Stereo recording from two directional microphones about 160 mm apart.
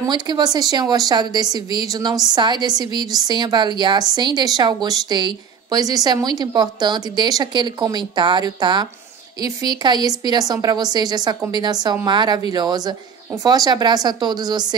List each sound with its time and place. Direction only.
0.1 s a woman's voice: 25° right (ahead or behind)